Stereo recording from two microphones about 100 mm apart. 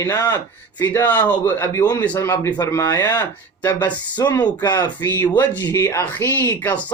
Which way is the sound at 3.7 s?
45° left (ahead or behind).